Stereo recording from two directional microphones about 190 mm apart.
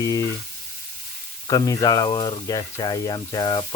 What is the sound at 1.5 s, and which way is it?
Speech, 20° left (ahead or behind).